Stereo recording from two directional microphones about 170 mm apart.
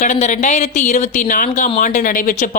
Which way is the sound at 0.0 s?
45° left (ahead or behind).